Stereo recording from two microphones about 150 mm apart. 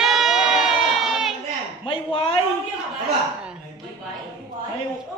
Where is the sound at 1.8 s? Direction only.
35° left (ahead or behind).